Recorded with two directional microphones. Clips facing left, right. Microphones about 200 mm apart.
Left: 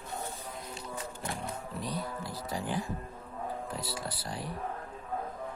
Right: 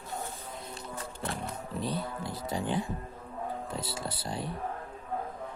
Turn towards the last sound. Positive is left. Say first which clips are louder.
# right 3 dB
turn(degrees=-25)  # may be behind; listen again after turning